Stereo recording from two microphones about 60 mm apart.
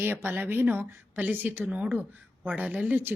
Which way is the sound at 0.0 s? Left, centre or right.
Right.